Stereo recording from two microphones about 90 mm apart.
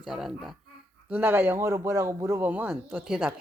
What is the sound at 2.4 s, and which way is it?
Speech, 20° right (ahead or behind).